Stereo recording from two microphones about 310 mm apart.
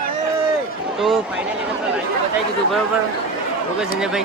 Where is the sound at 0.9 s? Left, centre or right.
Centre.